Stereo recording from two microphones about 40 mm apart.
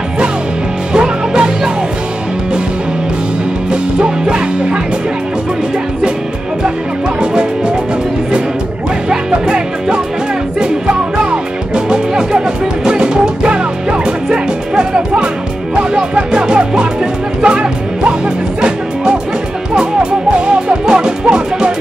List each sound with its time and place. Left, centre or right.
0.9 s music: right
7.2 s music: right
9.1 s music: right
11.2 s music: right
19.7 s music: right